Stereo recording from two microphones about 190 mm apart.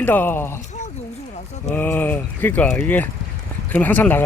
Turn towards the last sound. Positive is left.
turn(degrees=10)  # may be behind; listen again after turning